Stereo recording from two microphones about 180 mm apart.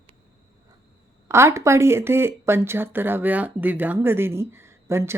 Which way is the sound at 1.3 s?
15° right (ahead or behind).